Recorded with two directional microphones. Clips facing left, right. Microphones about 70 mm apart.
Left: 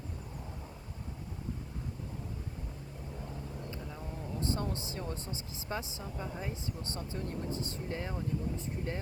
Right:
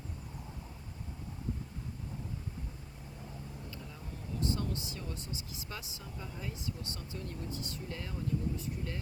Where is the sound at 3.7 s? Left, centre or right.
Left.